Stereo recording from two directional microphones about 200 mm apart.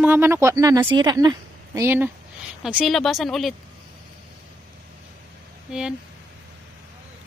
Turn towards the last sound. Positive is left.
turn(degrees=-5)  # may be behind; listen again after turning